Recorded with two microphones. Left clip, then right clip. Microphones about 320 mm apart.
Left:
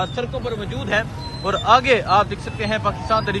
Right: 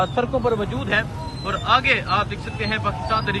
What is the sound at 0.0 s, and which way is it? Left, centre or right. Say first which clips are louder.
A man's voice: right 4 dB; centre.